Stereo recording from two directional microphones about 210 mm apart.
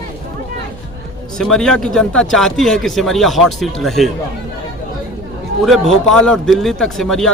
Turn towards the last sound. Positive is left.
turn(degrees=5)  # may be behind; listen again after turning